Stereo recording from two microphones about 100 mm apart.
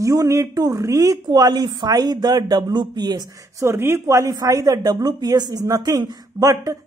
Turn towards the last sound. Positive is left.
turn(degrees=-35)  # may be behind; listen again after turning